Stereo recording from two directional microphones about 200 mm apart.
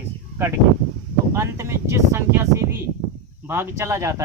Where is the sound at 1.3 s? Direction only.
15° right (ahead or behind).